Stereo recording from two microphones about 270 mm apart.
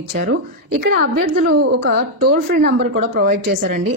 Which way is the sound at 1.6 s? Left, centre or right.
Right.